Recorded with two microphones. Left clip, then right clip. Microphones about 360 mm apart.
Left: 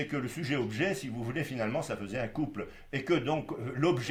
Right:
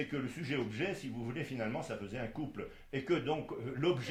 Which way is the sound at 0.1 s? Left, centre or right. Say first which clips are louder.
Left 4 dB; left.